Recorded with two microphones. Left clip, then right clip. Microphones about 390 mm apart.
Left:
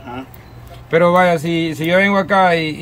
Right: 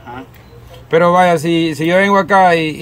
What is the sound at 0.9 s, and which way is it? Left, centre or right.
Speech, centre.